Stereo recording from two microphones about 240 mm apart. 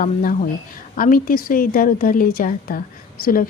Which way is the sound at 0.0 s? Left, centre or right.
Left.